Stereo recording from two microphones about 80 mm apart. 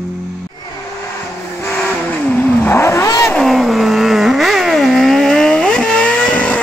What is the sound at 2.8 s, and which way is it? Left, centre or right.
Vehicle, left.